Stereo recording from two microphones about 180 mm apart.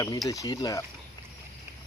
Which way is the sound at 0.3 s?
20° left (ahead or behind).